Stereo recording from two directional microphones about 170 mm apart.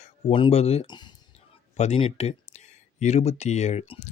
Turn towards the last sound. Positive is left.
turn(degrees=35)  # may be behind; listen again after turning